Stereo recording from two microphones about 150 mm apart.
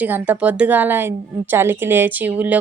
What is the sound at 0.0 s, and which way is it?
A woman's voice, 10° right (ahead or behind).